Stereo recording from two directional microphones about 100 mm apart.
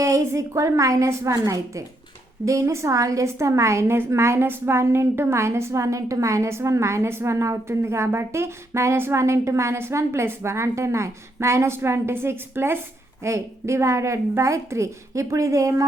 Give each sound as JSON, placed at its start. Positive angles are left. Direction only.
{"t": 0.0, "sound": "a woman's voice", "side_deg": -30}